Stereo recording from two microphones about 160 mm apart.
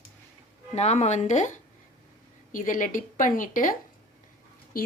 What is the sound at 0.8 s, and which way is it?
A woman's voice, 45° left (ahead or behind).